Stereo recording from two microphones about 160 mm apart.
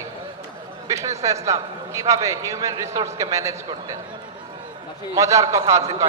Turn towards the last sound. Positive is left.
turn(degrees=-20)  # may be behind; listen again after turning